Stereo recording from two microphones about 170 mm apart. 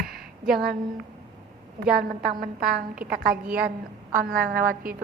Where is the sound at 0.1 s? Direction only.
60° right (ahead or behind).